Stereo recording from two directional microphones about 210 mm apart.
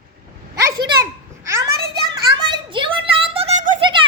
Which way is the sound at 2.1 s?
20° right (ahead or behind).